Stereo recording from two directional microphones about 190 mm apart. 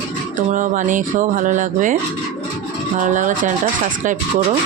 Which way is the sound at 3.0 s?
40° right (ahead or behind).